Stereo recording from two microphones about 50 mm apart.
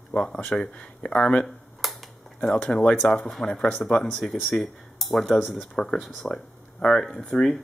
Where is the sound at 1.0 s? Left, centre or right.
Left.